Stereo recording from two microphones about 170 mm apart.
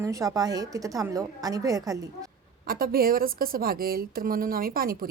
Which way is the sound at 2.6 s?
60° right (ahead or behind).